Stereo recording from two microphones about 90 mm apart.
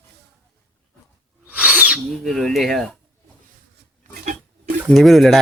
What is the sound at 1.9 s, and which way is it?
Speech, centre (ahead or behind).